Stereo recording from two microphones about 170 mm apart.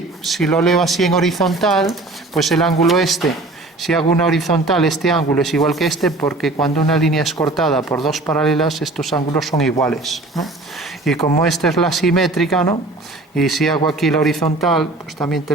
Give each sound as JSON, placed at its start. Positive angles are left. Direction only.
{"t": 0.3, "sound": "speech", "side_deg": 0}